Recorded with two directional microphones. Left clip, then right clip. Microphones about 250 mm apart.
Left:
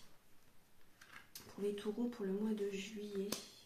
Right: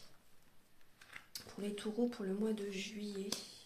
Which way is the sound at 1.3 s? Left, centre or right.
Right.